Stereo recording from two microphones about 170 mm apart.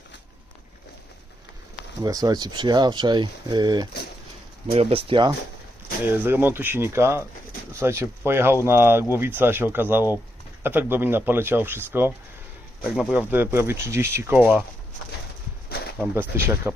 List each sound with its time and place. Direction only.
2.0 s speech: 20° right (ahead or behind)
6.1 s speech: 10° right (ahead or behind)
16.0 s speech: 10° right (ahead or behind)